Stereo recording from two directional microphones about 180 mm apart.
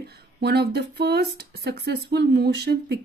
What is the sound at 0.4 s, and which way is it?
Speech, 65° right (ahead or behind).